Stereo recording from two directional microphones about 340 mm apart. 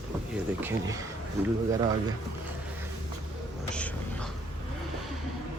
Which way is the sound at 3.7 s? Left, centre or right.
Centre.